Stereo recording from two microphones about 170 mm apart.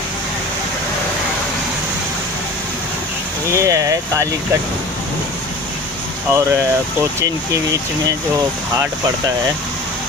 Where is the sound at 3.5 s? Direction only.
20° right (ahead or behind).